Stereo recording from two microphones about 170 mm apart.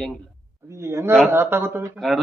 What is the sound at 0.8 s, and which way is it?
A man's voice, 15° right (ahead or behind).